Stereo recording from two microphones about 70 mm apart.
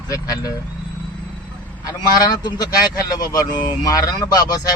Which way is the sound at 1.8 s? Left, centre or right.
Left.